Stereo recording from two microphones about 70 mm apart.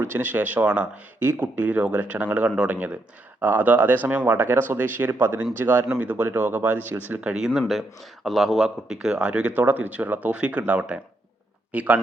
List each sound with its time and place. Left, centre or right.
0.0 s speech: right
1.2 s speech: right
1.5 s speech: right
7.7 s speech: centre; by 11.9 s right